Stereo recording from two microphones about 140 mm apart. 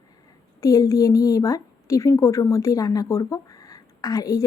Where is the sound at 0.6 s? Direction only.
25° left (ahead or behind).